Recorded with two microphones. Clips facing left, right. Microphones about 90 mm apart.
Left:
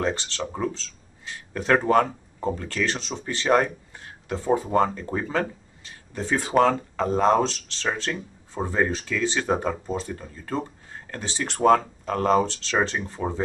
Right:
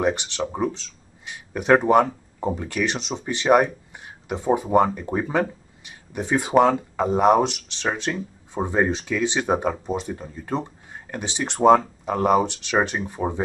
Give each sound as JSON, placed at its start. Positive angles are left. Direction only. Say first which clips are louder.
{"t": 0.0, "sound": "speech", "louder": "right 4 dB", "side_deg": -15}